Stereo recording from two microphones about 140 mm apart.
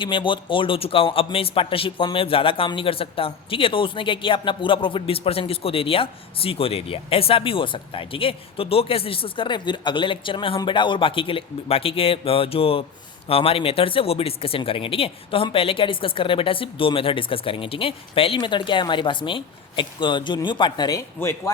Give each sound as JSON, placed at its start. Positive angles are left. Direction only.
{"t": 0.0, "sound": "a man's voice", "side_deg": 35}
{"t": 21.2, "sound": "speech", "side_deg": 20}